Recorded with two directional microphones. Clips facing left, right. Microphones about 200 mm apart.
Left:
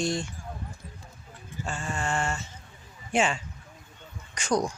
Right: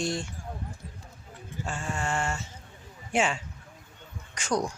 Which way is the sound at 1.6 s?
5° right (ahead or behind).